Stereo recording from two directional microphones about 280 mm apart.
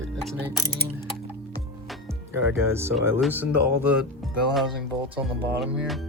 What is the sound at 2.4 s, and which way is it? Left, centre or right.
Speech, centre.